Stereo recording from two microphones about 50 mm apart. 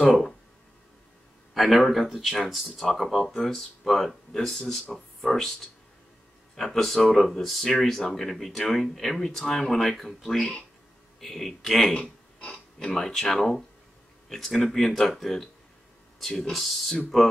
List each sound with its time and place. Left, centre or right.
1.5 s speech: centre
11.9 s a sound: centre
12.7 s speech: centre
16.4 s speech: centre